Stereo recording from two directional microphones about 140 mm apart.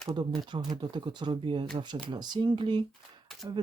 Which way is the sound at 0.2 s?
30° right (ahead or behind).